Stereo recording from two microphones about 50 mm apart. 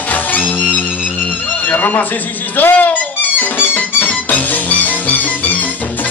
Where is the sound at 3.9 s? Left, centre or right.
Left.